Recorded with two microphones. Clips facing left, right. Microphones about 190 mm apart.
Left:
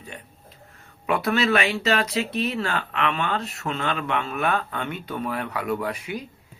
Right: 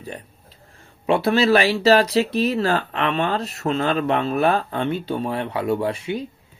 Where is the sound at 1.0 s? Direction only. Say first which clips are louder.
Right 5 dB; 30° right (ahead or behind).